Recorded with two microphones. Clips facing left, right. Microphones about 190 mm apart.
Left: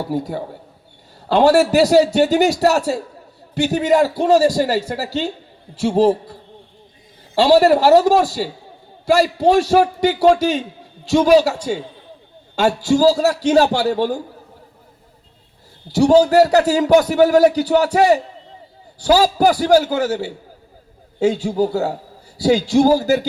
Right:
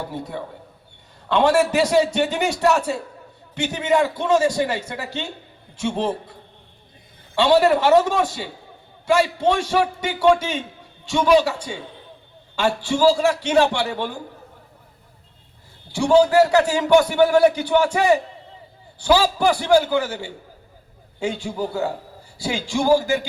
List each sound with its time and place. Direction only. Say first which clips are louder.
0.0 s a man's voice: left 7 dB; 35° left (ahead or behind)
7.3 s a man's voice: left 4 dB; 35° left (ahead or behind)
15.9 s a man's voice: left 4 dB; 40° left (ahead or behind)